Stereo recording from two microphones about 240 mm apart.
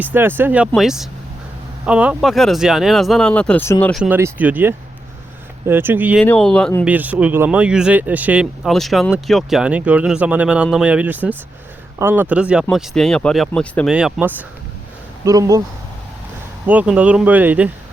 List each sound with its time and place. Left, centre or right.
0.0 s speech: centre
6.2 s speech: centre
16.6 s speech: centre